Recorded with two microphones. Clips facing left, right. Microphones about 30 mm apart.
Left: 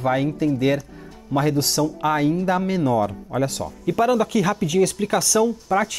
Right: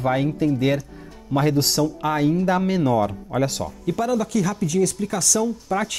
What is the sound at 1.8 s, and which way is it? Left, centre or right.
Speech, centre.